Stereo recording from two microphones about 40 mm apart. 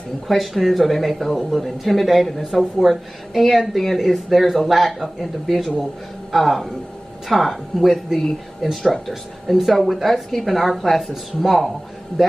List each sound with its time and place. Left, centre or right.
0.3 s speech: centre